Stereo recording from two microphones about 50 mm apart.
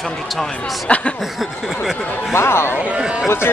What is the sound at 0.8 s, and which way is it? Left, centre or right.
Speech, left.